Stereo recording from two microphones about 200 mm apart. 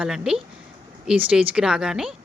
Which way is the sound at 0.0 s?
5° right (ahead or behind).